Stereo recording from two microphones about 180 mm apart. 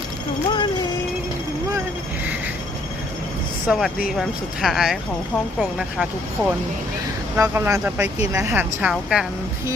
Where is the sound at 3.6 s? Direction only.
Centre (ahead or behind).